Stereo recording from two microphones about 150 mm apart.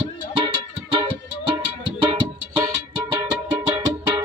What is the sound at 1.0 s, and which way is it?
Music, 35° right (ahead or behind).